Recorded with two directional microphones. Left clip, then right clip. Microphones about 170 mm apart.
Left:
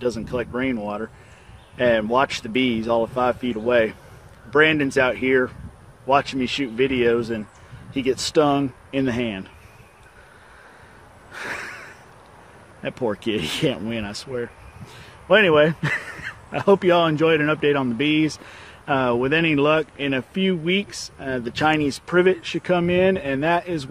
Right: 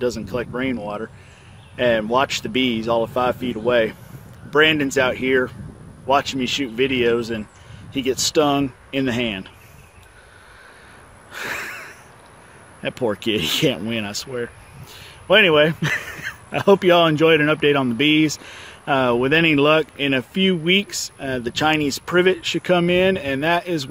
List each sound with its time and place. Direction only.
0.0 s speech: 20° right (ahead or behind)
11.3 s a sound: 25° right (ahead or behind)
12.8 s speech: 25° right (ahead or behind)